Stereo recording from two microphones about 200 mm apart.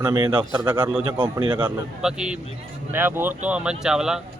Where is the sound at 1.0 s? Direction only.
20° right (ahead or behind).